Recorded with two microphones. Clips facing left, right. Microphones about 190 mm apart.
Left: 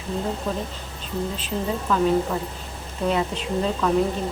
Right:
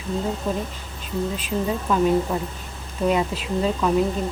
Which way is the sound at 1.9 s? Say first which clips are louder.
Right 1 dB; 15° right (ahead or behind).